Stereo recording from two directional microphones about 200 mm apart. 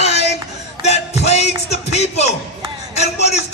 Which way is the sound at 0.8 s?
35° left (ahead or behind).